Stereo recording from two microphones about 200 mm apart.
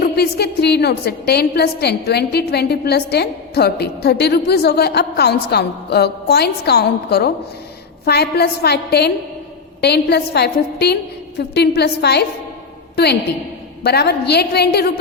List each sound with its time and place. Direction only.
0.0 s a woman's voice: 55° left (ahead or behind)
13.8 s a woman's voice: 55° left (ahead or behind)